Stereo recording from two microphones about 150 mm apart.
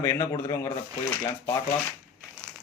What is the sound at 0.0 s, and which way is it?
Speech, 20° left (ahead or behind).